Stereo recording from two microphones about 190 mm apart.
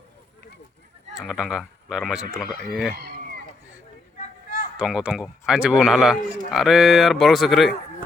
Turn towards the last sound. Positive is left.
turn(degrees=0)  # may be behind; listen again after turning